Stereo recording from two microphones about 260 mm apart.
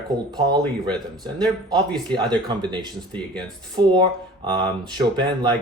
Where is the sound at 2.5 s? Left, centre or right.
Centre.